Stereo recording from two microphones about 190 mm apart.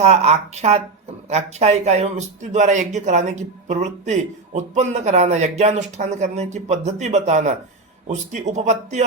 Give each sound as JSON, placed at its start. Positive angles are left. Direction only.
{"t": 0.0, "sound": "speech", "side_deg": -35}